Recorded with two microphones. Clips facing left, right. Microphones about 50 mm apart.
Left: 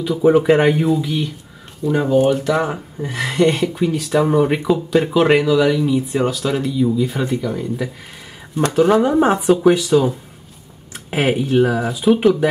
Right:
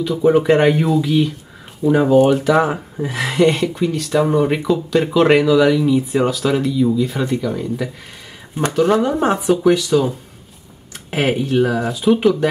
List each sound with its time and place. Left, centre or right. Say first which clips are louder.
0.0 s speech: left 1 dB; centre